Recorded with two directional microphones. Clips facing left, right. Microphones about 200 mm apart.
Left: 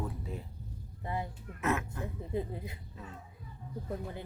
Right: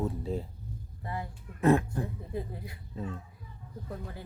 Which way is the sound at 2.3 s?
20° left (ahead or behind).